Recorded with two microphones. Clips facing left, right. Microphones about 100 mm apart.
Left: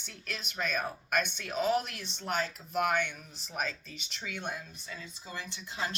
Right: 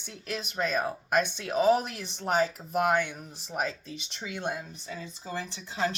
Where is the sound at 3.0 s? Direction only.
30° right (ahead or behind).